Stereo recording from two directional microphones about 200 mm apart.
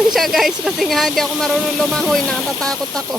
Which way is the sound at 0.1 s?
Centre (ahead or behind).